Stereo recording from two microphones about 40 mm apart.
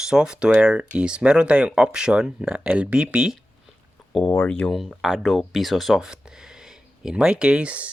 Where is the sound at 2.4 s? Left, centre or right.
Right.